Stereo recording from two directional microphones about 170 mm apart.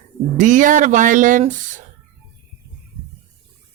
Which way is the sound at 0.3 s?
50° right (ahead or behind).